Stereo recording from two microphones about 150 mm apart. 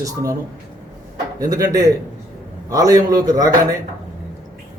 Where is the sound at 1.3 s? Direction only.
25° right (ahead or behind).